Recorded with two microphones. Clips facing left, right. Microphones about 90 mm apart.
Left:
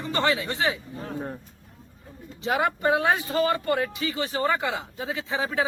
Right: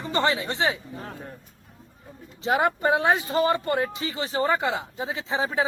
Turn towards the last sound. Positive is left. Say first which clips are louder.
# right 1 dB
turn(degrees=-25)  # may be behind; listen again after turning